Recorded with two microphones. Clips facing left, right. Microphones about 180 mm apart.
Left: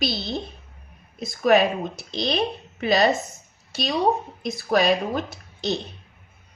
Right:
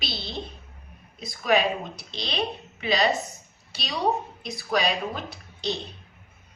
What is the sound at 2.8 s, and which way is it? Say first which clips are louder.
Speech: left 4 dB; 45° left (ahead or behind).